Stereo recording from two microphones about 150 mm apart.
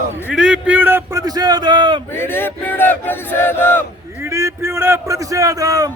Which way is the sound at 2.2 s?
15° left (ahead or behind).